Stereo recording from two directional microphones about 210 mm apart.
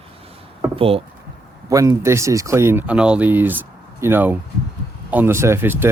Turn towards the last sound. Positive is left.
turn(degrees=-10)  # may be behind; listen again after turning